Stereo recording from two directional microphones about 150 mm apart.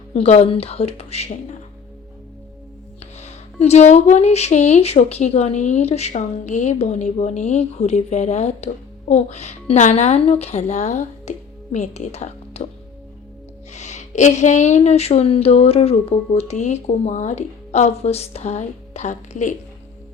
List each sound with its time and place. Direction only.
0.1 s speech: 45° left (ahead or behind)
3.2 s speech: 45° left (ahead or behind)
13.7 s speech: 50° left (ahead or behind)